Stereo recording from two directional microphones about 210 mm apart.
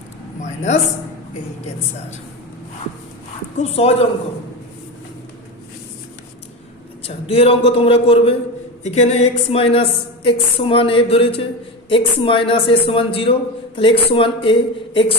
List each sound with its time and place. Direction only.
0.4 s a man's voice: 35° left (ahead or behind)
3.6 s speech: 30° left (ahead or behind)
7.0 s speech: 30° left (ahead or behind)